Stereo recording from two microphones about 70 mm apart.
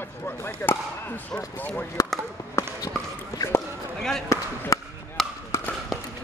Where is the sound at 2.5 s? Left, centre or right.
Left.